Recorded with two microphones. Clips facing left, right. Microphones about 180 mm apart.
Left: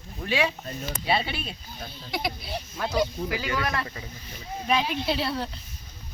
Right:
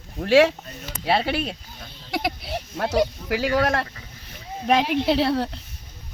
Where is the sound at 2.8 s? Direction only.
75° right (ahead or behind).